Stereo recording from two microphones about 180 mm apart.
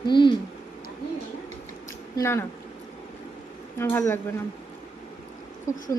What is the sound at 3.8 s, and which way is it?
Speech, 15° left (ahead or behind).